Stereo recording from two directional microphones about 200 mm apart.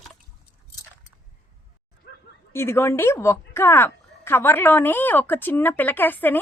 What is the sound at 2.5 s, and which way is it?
A woman's voice, 10° left (ahead or behind).